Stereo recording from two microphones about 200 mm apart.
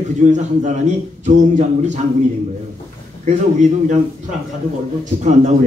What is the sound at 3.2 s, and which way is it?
Speech, 35° right (ahead or behind).